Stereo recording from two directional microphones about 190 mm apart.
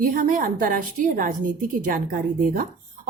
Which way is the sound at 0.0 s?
45° right (ahead or behind).